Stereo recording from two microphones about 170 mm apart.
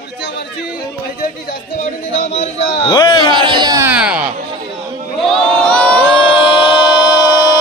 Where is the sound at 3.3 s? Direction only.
25° right (ahead or behind).